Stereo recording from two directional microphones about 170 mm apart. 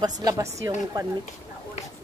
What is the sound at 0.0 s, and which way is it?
A woman's voice, 25° right (ahead or behind).